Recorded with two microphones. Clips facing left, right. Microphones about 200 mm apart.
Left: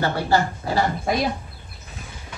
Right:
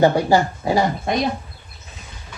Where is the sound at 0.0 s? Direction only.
15° right (ahead or behind).